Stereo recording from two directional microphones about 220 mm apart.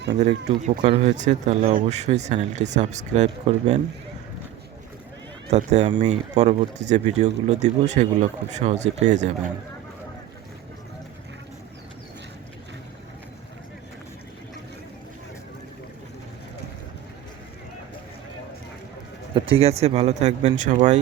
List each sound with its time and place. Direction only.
0.2 s speech: 30° right (ahead or behind)
5.5 s speech: 30° right (ahead or behind)
19.3 s speech: 25° right (ahead or behind)